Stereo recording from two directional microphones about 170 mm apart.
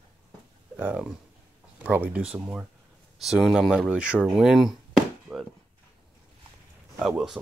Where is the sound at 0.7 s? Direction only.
10° right (ahead or behind).